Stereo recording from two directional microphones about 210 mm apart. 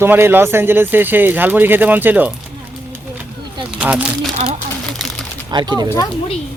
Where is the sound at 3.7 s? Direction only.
5° right (ahead or behind).